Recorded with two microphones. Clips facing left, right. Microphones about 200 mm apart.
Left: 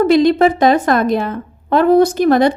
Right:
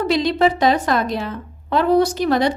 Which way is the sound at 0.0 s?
50° left (ahead or behind).